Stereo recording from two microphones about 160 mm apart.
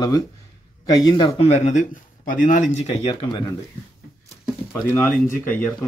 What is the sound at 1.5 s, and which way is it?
Speech, 50° left (ahead or behind).